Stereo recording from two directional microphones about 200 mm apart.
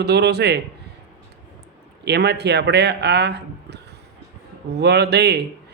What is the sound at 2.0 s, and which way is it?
A man's voice, 55° right (ahead or behind).